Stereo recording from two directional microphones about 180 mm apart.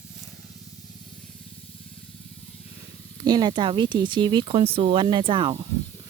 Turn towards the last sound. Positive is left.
turn(degrees=-30)  # may be behind; listen again after turning